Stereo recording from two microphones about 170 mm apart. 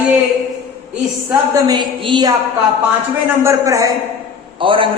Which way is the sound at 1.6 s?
25° right (ahead or behind).